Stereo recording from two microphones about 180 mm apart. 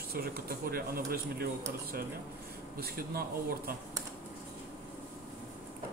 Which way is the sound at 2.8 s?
60° right (ahead or behind).